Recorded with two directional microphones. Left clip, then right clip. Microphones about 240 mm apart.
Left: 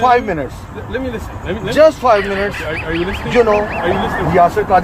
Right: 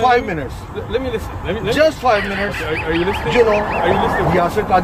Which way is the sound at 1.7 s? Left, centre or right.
Left.